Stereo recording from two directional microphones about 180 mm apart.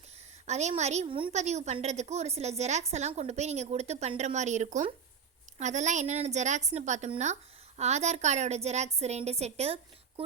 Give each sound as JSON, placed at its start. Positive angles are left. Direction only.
{"t": 0.4, "sound": "a woman's voice", "side_deg": -40}